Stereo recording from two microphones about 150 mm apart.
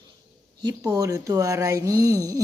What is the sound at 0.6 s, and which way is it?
A woman's voice, 25° right (ahead or behind).